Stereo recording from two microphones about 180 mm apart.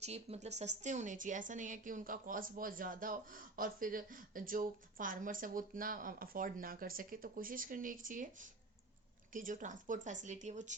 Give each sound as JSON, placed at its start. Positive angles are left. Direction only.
{"t": 0.0, "sound": "a woman's voice", "side_deg": -35}